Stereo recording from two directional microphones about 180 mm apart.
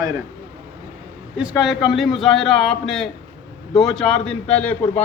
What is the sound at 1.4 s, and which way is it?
A man's voice, 5° right (ahead or behind).